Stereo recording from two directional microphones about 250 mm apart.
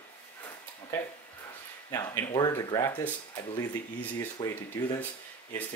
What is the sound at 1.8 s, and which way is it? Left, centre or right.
Speech, centre.